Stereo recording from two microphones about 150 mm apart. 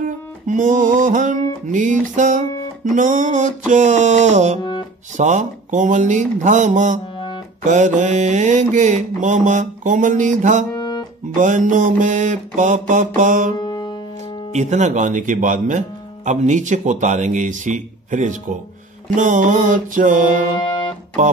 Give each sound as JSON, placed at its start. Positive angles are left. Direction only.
{"t": 0.0, "sound": "music", "side_deg": -60}
{"t": 1.7, "sound": "mantra", "side_deg": -55}
{"t": 10.7, "sound": "music", "side_deg": 30}
{"t": 11.3, "sound": "mantra", "side_deg": -60}
{"t": 13.6, "sound": "music", "side_deg": 25}
{"t": 14.5, "sound": "mantra", "side_deg": -50}
{"t": 20.5, "sound": "music", "side_deg": 35}